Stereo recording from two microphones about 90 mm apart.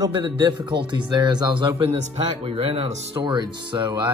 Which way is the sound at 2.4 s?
85° right.